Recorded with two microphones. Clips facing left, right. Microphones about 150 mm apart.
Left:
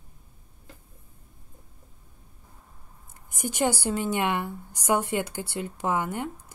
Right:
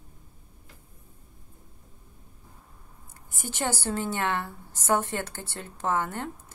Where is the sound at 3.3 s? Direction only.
15° left (ahead or behind).